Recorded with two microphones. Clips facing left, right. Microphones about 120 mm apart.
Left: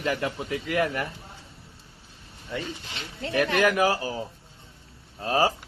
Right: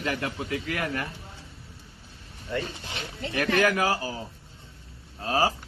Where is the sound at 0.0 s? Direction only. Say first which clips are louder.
Left 2 dB; 25° left (ahead or behind).